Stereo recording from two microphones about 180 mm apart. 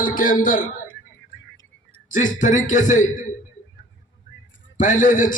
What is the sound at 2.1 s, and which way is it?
Speech, 45° left (ahead or behind).